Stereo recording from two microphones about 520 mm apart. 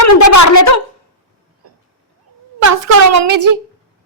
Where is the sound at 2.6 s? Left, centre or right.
Right.